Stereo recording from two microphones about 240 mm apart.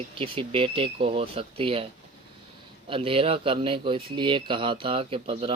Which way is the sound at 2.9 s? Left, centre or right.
Right.